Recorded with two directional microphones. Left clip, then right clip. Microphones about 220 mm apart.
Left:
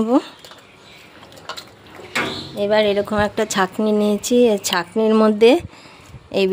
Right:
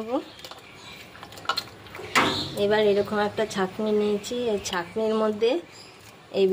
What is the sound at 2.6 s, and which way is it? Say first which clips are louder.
A woman's voice: left 5 dB; 40° left (ahead or behind).